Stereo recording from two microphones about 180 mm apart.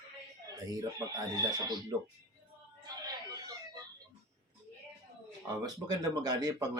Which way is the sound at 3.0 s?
20° right (ahead or behind).